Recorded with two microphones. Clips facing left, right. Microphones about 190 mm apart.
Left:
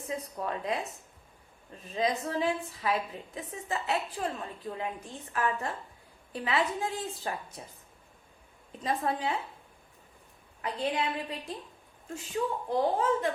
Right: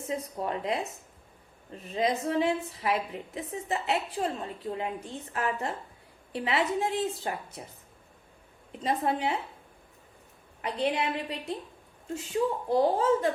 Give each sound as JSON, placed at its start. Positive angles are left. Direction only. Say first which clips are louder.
{"t": 0.1, "sound": "a woman's voice", "louder": "right 2 dB", "side_deg": -25}
{"t": 8.7, "sound": "a woman's voice", "louder": "right 2 dB", "side_deg": -25}
{"t": 10.6, "sound": "a woman's voice", "louder": "right 2 dB", "side_deg": -20}